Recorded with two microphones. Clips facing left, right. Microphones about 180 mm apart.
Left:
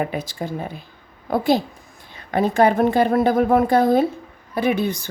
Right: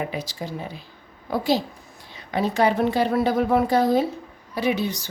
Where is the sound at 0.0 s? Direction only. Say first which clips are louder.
Left 4 dB; 50° left (ahead or behind).